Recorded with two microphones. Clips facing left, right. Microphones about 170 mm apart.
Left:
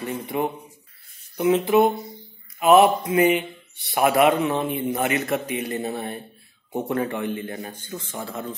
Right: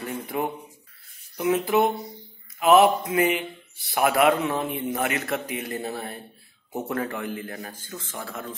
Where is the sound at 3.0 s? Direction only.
25° left (ahead or behind).